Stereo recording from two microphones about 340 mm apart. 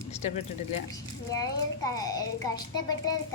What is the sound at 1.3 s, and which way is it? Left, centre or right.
A child's voice, centre.